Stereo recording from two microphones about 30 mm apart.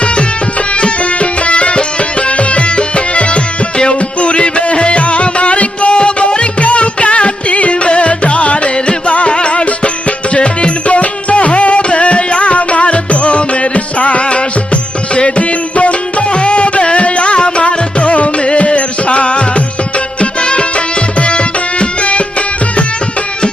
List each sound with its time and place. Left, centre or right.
0.7 s music: left